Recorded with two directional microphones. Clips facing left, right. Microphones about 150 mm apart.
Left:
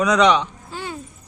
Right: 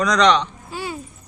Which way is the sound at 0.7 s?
10° right (ahead or behind).